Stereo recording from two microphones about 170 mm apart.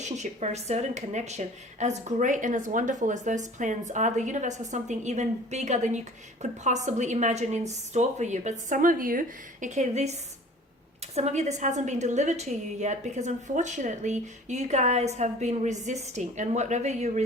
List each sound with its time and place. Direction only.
0.0 s a woman's voice: 40° right (ahead or behind)